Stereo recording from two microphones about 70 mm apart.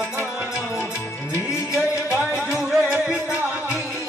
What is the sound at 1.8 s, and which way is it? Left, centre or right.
Music, left.